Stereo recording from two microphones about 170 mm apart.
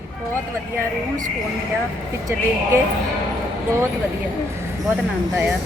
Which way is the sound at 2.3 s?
15° right (ahead or behind).